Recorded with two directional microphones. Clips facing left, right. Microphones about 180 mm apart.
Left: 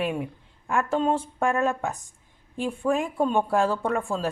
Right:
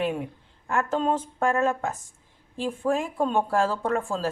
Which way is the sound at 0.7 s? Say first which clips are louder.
Left 1 dB; 10° left (ahead or behind).